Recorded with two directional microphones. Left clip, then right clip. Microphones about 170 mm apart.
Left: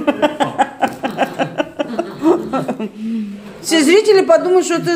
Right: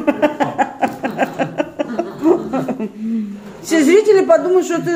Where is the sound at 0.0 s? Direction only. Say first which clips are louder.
Even; 5° right (ahead or behind).